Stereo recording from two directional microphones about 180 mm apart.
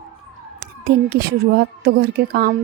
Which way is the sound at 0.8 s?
60° right (ahead or behind).